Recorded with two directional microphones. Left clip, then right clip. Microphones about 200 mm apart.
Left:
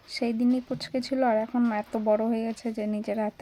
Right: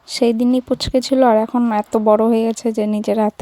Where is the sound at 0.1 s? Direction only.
40° right (ahead or behind).